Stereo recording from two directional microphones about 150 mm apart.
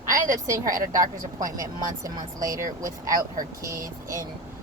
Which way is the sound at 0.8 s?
60° right (ahead or behind).